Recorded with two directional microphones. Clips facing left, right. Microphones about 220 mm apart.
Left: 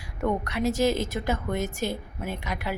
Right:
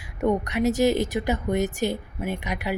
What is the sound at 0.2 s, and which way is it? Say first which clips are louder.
Speech: right 4 dB; 20° right (ahead or behind).